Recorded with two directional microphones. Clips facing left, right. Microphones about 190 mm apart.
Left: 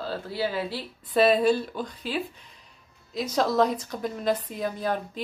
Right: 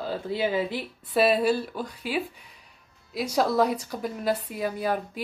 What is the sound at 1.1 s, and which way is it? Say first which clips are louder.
A woman's voice: left 1 dB; 5° right (ahead or behind).